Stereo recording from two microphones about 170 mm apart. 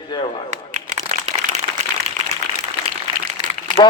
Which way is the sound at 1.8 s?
40° right (ahead or behind).